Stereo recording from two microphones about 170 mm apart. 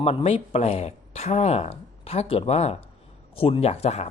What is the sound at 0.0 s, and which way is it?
Speech, 35° left (ahead or behind).